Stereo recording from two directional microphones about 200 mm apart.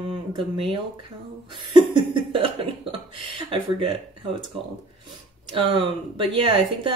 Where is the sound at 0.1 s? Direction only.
25° right (ahead or behind).